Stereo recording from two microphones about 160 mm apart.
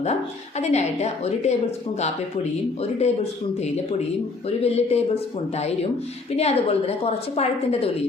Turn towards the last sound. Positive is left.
turn(degrees=40)  # may be behind; listen again after turning